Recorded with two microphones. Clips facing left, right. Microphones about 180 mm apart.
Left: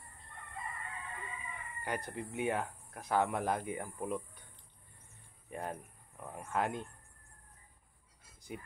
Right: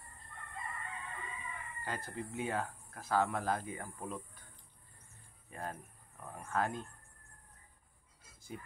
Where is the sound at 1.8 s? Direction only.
20° left (ahead or behind).